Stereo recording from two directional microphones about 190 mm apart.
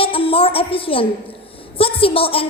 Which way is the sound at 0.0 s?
30° left (ahead or behind).